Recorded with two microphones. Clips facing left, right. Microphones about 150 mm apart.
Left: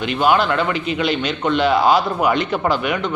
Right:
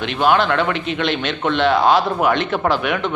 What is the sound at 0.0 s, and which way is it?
A man's voice, centre (ahead or behind).